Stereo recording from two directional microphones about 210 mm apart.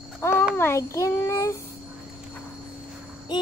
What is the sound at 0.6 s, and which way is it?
Child singing, 15° left (ahead or behind).